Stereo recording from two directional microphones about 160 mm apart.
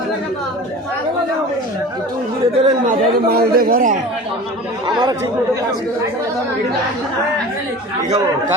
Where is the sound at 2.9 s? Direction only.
70° right (ahead or behind).